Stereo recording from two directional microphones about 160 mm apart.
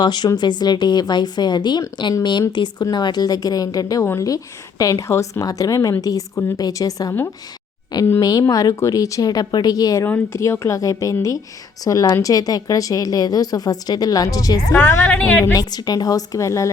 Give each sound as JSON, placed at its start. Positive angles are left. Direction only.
{"t": 0.0, "sound": "speech", "side_deg": 25}